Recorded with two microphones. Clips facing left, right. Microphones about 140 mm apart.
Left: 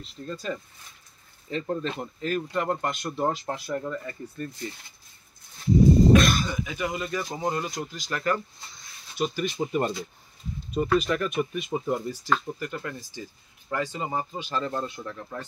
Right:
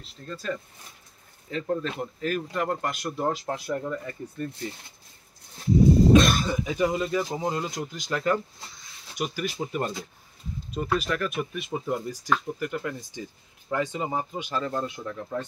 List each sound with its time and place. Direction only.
0.0 s speech: 5° left (ahead or behind)
1.5 s speech: centre (ahead or behind)
6.1 s speech: 30° right (ahead or behind)
7.2 s speech: 10° right (ahead or behind)
9.1 s speech: 10° right (ahead or behind)
9.6 s speech: 5° left (ahead or behind)
12.1 s speech: 15° right (ahead or behind)